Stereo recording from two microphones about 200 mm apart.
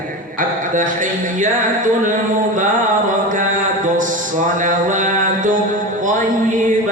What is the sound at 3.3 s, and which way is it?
Mantra, 40° right (ahead or behind).